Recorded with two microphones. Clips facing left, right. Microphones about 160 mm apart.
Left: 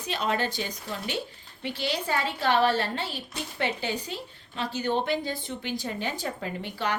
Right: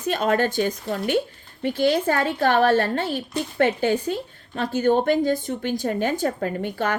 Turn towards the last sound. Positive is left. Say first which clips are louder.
# right 6 dB
turn(degrees=-50)  # may be behind; listen again after turning